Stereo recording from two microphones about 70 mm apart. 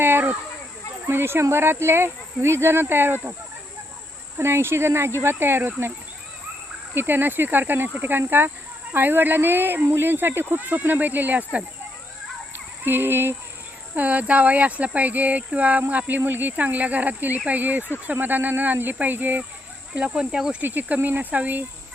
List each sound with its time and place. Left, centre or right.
0.0 s a sound: right
1.0 s speech: right
4.4 s speech: right
6.9 s speech: right
12.5 s a sound: right
13.9 s speech: right
20.0 s speech: centre
20.6 s speech: right